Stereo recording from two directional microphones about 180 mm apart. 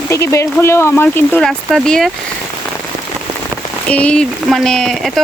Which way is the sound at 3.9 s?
5° left (ahead or behind).